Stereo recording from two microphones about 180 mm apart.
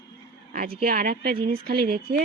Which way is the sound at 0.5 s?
55° right (ahead or behind).